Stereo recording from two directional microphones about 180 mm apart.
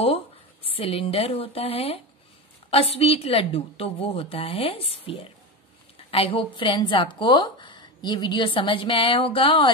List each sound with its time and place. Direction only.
0.7 s a woman's voice: 30° left (ahead or behind)